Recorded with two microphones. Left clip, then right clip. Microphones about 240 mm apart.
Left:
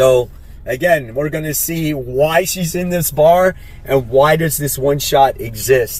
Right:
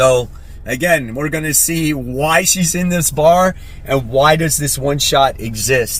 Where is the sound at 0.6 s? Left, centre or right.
Right.